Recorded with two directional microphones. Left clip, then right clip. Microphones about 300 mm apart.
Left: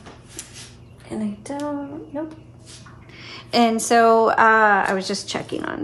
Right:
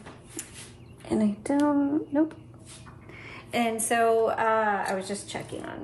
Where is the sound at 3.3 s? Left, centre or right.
Centre.